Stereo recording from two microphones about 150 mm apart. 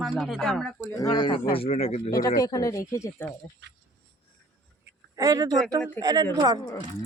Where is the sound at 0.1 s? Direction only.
5° left (ahead or behind).